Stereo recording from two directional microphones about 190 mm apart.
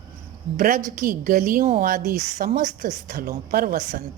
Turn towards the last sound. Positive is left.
turn(degrees=-45)  # may be behind; listen again after turning